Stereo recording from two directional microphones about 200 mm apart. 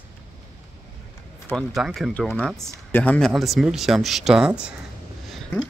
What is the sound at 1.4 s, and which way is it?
Speech, centre (ahead or behind).